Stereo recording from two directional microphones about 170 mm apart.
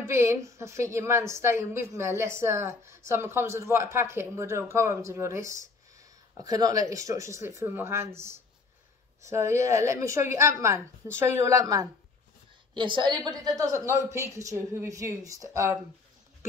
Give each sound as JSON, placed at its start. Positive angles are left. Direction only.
{"t": 0.0, "sound": "a woman's voice", "side_deg": -15}